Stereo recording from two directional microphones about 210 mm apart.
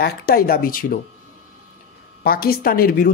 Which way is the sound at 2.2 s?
45° left (ahead or behind).